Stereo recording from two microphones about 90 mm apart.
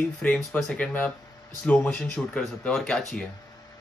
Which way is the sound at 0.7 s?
15° left (ahead or behind).